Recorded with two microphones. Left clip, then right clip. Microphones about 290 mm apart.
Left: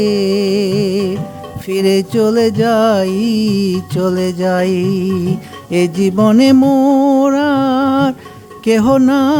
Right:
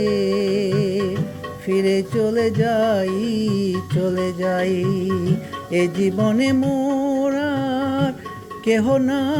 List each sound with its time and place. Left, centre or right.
0.0 s music: left